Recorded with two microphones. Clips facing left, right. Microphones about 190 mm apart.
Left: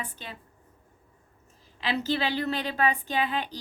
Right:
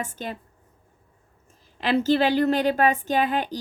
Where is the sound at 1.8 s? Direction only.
50° right (ahead or behind).